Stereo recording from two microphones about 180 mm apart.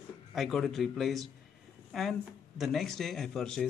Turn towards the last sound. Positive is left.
turn(degrees=5)  # may be behind; listen again after turning